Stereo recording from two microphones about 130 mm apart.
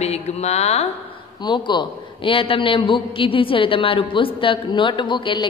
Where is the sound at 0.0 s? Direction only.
55° left (ahead or behind).